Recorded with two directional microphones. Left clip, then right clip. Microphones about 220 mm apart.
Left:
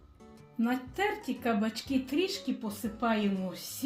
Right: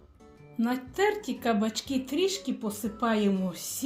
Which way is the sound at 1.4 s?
30° right (ahead or behind).